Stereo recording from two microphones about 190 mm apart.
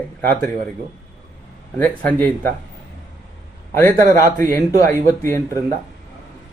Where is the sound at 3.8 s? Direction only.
45° right (ahead or behind).